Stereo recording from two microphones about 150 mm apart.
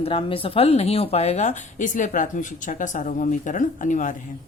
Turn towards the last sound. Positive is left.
turn(degrees=60)  # may be behind; listen again after turning